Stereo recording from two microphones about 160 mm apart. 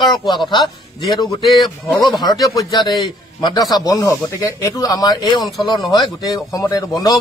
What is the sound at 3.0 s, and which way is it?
A man's voice, 25° left (ahead or behind).